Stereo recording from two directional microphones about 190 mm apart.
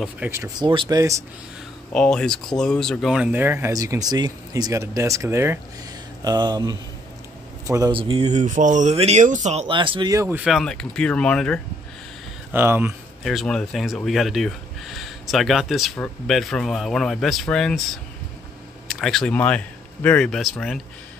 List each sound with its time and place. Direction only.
0.3 s speech: 20° right (ahead or behind)
1.9 s speech: 5° left (ahead or behind)
12.5 s speech: 10° right (ahead or behind)
13.2 s speech: centre (ahead or behind)
18.9 s speech: centre (ahead or behind)